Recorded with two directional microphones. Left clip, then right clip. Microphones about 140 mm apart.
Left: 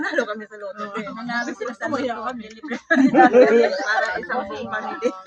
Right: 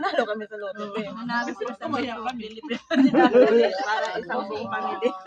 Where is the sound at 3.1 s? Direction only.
20° left (ahead or behind).